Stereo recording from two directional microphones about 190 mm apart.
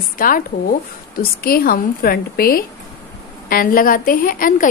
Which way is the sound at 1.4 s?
50° left (ahead or behind).